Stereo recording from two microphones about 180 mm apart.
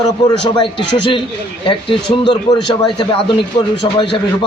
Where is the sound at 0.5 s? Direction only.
25° left (ahead or behind).